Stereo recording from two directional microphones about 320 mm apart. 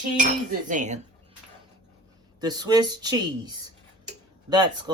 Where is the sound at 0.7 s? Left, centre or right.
Right.